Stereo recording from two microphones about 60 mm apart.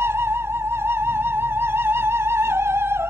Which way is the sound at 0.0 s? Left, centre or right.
Right.